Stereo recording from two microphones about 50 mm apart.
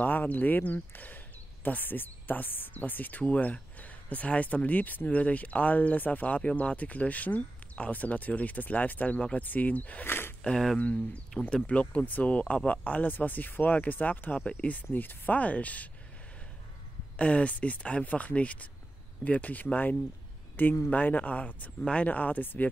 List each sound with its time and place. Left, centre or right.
0.0 s speech: left
10.0 s a sound: left
11.5 s speech: left
14.3 s speech: left
14.9 s speech: left
17.2 s speech: left